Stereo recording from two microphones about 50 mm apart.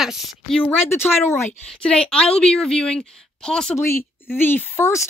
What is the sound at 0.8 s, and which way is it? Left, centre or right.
Speech, left.